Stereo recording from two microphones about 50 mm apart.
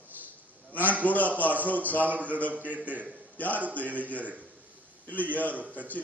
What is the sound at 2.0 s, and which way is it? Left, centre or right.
A man's voice, right.